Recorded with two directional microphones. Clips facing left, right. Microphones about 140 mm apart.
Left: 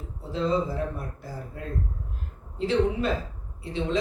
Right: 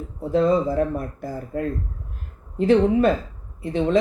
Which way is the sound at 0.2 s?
50° right (ahead or behind).